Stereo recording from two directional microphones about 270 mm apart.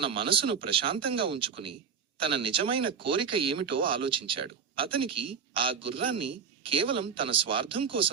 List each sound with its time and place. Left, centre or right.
0.0 s speech: centre
3.6 s speech: right
3.9 s speech: centre